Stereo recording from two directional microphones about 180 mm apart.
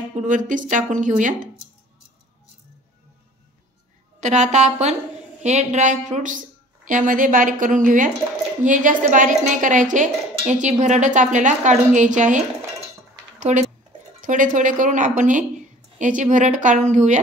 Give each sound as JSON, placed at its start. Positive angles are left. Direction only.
{"t": 0.1, "sound": "speech", "side_deg": -45}
{"t": 4.2, "sound": "a woman's voice", "side_deg": -40}